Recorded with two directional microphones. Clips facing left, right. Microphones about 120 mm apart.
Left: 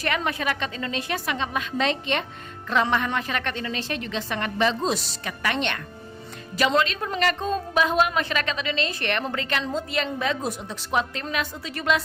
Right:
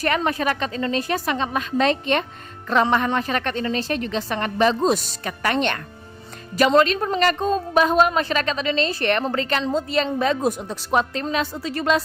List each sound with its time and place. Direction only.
0.0 s a woman's voice: 40° right (ahead or behind)